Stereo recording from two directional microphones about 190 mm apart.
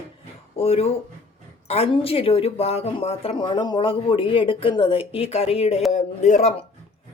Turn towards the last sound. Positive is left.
turn(degrees=35)  # may be behind; listen again after turning